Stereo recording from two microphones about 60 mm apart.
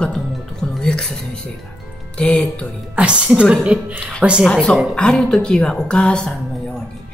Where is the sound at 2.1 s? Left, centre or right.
Centre.